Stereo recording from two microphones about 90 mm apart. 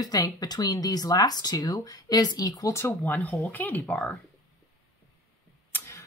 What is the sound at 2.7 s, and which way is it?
Speech, 30° left (ahead or behind).